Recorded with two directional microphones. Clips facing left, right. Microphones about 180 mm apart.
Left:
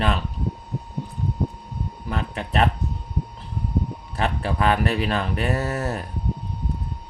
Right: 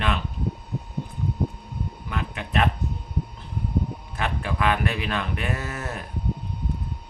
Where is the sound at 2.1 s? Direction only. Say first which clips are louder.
Left 4 dB; 35° left (ahead or behind).